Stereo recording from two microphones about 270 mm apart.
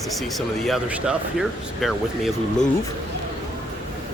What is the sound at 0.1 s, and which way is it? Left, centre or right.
Speech, centre.